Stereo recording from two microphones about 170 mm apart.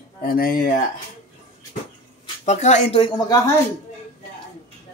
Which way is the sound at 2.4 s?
40° left (ahead or behind).